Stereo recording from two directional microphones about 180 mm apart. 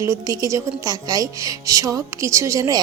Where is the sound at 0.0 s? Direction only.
15° right (ahead or behind).